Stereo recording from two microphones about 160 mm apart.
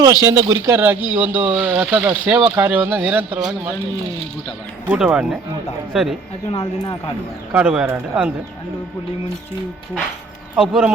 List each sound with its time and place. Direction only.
0.3 s speech: 15° right (ahead or behind)
4.9 s speech: 5° right (ahead or behind)
6.5 s speech: 35° left (ahead or behind)
7.5 s speech: 5° right (ahead or behind)
10.5 s speech: 5° right (ahead or behind)